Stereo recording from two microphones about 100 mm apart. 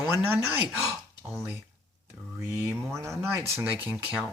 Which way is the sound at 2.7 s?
30° right (ahead or behind).